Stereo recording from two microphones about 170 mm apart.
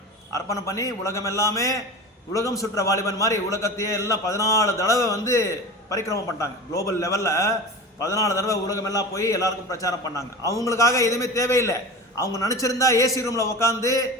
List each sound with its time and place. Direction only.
0.3 s a man's voice: 20° left (ahead or behind)